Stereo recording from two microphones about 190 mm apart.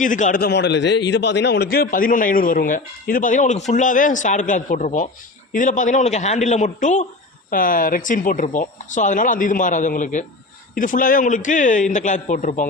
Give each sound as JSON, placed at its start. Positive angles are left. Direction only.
{"t": 0.0, "sound": "a man's voice", "side_deg": 40}